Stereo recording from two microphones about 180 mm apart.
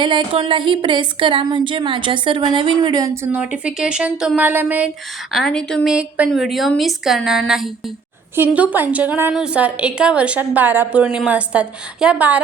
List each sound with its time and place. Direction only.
0.0 s speech: 25° right (ahead or behind)
3.3 s a woman's voice: 5° right (ahead or behind)
5.3 s a woman's voice: 5° left (ahead or behind)